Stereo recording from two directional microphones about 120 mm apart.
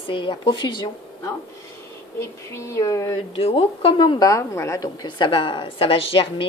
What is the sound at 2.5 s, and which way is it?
Speech, 25° left (ahead or behind).